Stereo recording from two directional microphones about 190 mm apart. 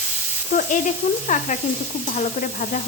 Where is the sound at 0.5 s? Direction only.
35° left (ahead or behind).